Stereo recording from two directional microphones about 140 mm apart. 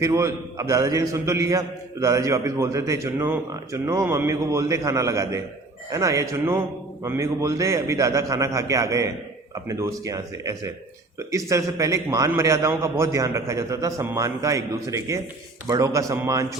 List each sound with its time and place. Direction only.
0.0 s a man's voice: 20° right (ahead or behind)